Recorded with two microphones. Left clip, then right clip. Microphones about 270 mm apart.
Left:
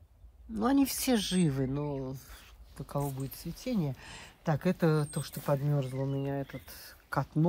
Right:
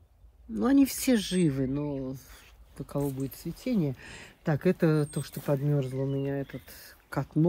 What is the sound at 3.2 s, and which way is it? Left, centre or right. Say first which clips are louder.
Speech: right 5 dB; centre.